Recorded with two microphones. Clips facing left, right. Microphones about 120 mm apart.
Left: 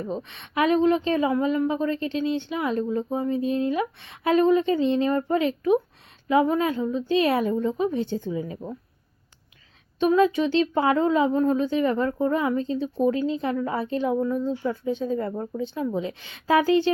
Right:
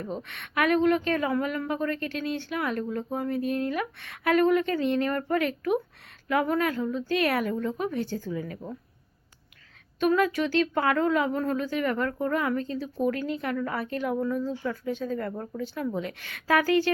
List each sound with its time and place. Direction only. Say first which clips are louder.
0.0 s speech: left 4 dB; 20° left (ahead or behind)
10.0 s speech: left 4 dB; 20° left (ahead or behind)